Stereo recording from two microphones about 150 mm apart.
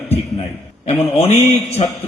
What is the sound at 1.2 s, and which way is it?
Speech, 40° left (ahead or behind).